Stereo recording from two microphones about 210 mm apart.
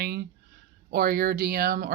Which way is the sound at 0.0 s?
50° right (ahead or behind).